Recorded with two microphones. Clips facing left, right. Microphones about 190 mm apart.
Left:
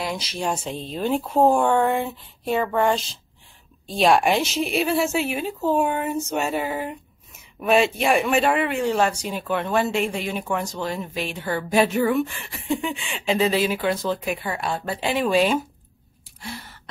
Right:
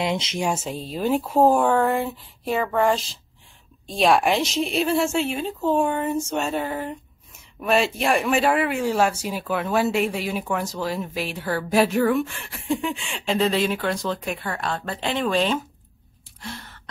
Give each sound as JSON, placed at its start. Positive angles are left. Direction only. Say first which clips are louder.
{"t": 0.0, "sound": "speech", "louder": "right 3 dB", "side_deg": -20}
{"t": 0.5, "sound": "speech", "louder": "right 1 dB", "side_deg": -5}
{"t": 16.3, "sound": "gasp", "louder": "left 1 dB", "side_deg": 5}